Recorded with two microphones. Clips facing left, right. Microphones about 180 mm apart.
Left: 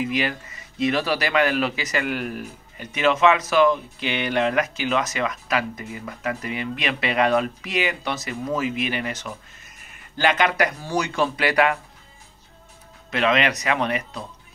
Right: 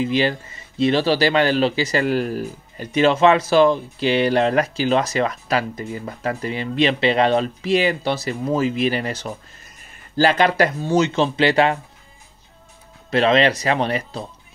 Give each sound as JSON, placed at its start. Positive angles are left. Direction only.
{"t": 0.0, "sound": "speech", "side_deg": -30}
{"t": 13.1, "sound": "speech", "side_deg": -30}